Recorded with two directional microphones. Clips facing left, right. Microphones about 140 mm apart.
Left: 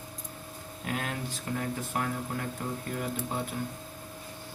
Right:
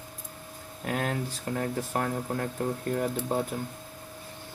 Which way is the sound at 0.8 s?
45° right (ahead or behind).